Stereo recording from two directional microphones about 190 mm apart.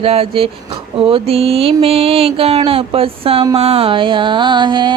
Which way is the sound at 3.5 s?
30° right (ahead or behind).